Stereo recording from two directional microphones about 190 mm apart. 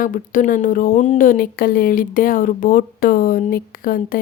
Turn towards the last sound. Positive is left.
turn(degrees=50)  # may be behind; listen again after turning